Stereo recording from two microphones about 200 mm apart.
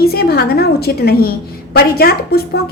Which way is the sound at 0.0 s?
50° left (ahead or behind).